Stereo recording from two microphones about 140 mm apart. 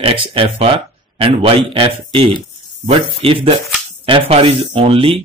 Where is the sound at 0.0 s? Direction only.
40° right (ahead or behind).